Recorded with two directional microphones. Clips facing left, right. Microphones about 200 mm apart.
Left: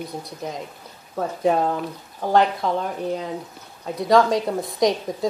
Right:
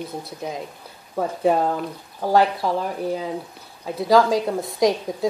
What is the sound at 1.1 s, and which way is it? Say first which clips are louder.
A woman's voice: right 1 dB; 5° right (ahead or behind).